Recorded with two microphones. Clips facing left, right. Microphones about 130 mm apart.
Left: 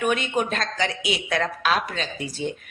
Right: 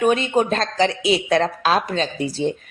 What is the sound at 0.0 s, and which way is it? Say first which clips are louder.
Speech: right 6 dB; 30° right (ahead or behind).